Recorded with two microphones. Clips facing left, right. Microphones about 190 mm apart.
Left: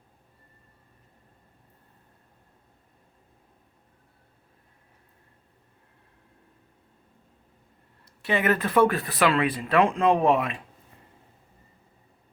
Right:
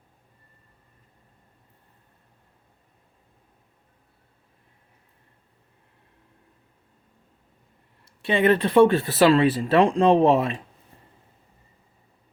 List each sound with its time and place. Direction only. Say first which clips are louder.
8.0 s speech: right 5 dB; 25° right (ahead or behind)